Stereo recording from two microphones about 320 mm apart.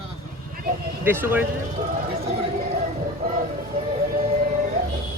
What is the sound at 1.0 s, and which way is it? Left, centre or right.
Speech, centre.